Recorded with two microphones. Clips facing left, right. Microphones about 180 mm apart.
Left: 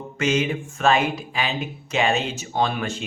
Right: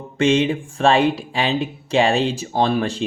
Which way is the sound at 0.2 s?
30° right (ahead or behind).